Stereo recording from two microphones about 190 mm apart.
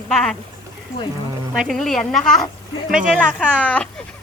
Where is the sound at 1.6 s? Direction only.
Centre (ahead or behind).